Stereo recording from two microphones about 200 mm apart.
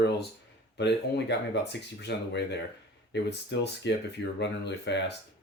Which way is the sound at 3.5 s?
65° left (ahead or behind).